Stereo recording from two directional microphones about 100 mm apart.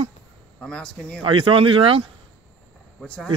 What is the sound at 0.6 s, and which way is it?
Speech, 10° left (ahead or behind).